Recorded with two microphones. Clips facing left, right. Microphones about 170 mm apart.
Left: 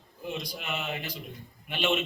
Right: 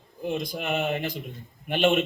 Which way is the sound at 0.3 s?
50° right (ahead or behind).